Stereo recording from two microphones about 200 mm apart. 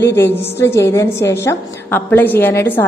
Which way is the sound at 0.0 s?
10° left (ahead or behind).